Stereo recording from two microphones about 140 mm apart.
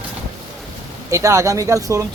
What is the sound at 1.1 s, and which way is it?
Speech, 20° right (ahead or behind).